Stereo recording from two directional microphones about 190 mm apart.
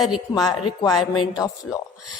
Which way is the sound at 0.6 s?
20° left (ahead or behind).